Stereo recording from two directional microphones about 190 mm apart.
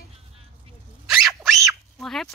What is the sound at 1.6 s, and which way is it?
Duck, centre (ahead or behind).